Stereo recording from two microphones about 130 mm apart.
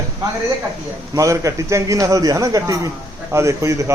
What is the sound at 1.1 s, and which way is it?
A man's voice, 25° right (ahead or behind).